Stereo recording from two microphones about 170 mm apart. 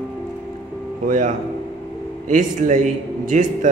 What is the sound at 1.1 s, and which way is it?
A man's voice, 50° right (ahead or behind).